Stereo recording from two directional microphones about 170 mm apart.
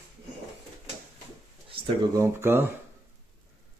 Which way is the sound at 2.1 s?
15° right (ahead or behind).